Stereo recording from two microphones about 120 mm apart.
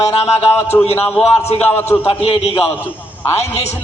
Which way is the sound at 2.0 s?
55° left (ahead or behind).